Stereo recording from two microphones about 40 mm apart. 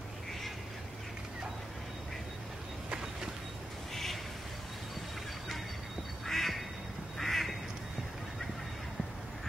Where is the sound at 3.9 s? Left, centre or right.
Centre.